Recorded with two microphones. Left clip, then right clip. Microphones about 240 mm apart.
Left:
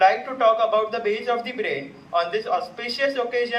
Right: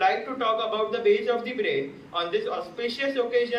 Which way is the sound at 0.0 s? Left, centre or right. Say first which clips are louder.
Left 6 dB; centre.